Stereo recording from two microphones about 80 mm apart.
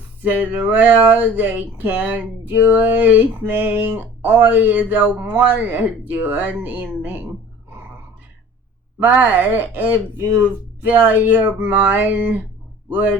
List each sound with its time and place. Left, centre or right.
0.3 s speech: right
9.0 s speech: right